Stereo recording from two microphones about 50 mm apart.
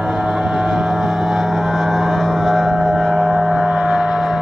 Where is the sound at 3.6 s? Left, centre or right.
Centre.